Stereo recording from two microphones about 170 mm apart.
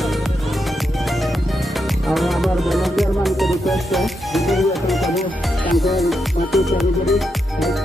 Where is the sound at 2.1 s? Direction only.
Centre (ahead or behind).